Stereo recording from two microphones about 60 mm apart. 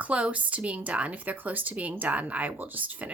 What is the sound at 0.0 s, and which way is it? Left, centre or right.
Speech, right.